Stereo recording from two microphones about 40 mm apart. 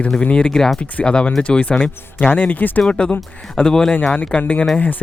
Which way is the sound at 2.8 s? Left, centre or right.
Left.